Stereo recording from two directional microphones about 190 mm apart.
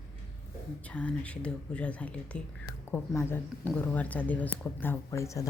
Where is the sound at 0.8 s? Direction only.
5° left (ahead or behind).